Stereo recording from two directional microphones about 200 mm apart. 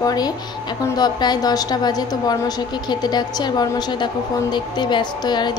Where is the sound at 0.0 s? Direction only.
20° left (ahead or behind).